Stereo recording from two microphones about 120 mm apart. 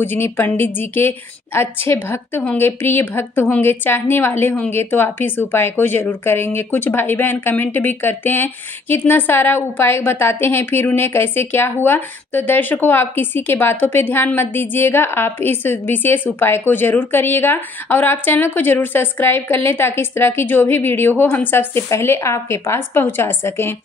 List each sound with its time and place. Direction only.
0.0 s a woman's voice: 15° left (ahead or behind)